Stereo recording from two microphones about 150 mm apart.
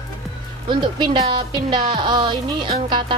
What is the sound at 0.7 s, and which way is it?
A woman's voice, 30° right (ahead or behind).